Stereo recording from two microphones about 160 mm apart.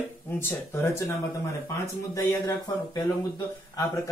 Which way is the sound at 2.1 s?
20° left (ahead or behind).